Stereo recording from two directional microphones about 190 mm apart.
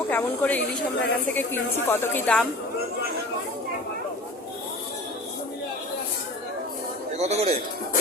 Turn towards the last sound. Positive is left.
turn(degrees=-35)  # may be behind; listen again after turning